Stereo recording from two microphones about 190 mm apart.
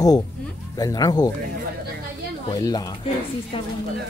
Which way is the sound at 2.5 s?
20° left (ahead or behind).